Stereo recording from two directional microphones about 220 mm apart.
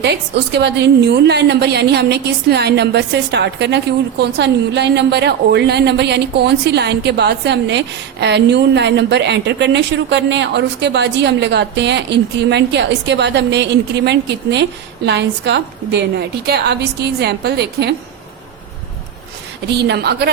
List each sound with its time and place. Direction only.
0.0 s a woman's voice: 50° right (ahead or behind)
19.6 s a woman's voice: 50° right (ahead or behind)